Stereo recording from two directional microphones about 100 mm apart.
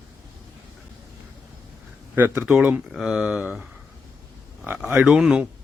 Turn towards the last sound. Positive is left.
turn(degrees=-5)  # may be behind; listen again after turning